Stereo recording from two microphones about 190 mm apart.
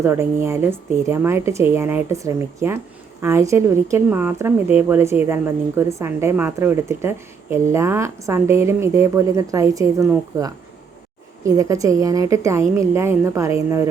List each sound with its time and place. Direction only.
0.0 s speech: 15° right (ahead or behind)